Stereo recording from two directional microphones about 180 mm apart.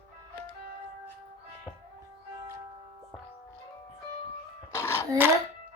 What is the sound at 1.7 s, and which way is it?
Music, 5° left (ahead or behind).